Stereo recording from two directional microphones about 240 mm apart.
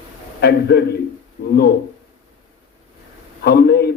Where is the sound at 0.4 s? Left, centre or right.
Left.